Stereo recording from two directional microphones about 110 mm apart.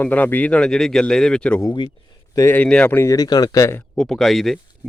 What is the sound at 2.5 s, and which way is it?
Speech, 15° left (ahead or behind).